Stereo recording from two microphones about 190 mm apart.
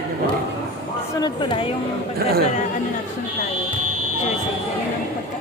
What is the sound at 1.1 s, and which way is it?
Speech, 25° left (ahead or behind).